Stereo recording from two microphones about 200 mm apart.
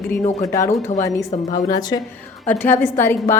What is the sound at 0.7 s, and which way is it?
Speech, 35° left (ahead or behind).